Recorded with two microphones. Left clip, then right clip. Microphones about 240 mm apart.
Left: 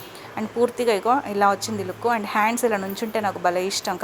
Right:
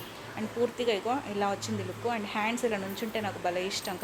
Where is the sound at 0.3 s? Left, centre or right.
Left.